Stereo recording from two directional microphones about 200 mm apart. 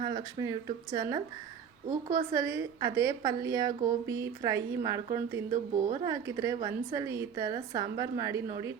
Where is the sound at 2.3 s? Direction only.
15° right (ahead or behind).